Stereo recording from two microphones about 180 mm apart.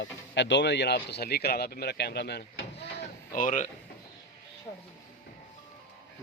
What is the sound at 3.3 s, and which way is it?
Speech, 45° left (ahead or behind).